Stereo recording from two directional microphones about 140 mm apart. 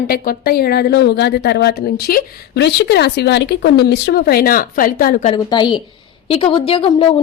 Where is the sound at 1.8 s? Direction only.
90° left.